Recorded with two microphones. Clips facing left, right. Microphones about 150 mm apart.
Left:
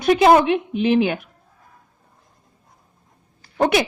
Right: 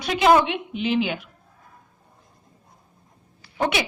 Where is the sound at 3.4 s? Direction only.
50° left (ahead or behind).